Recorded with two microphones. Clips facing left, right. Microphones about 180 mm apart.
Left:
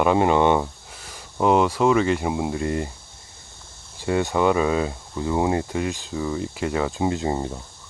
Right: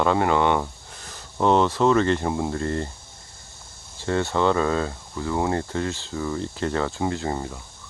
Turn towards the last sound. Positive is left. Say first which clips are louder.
# left 3 dB
turn(degrees=20)  # may be behind; listen again after turning